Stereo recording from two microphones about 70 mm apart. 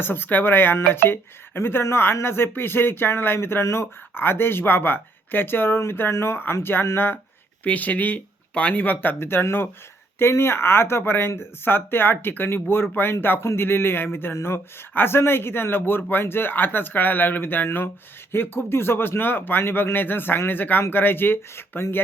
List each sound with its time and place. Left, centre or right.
0.0 s speech: left
7.6 s speech: left